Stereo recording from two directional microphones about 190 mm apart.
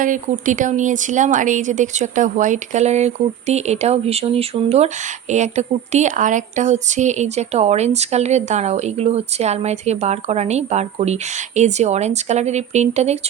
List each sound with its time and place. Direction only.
0.0 s a woman's voice: 45° right (ahead or behind)